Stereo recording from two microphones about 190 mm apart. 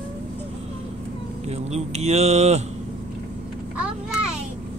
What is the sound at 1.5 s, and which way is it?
Speech, 35° right (ahead or behind).